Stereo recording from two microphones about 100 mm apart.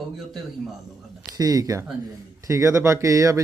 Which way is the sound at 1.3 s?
40° right (ahead or behind).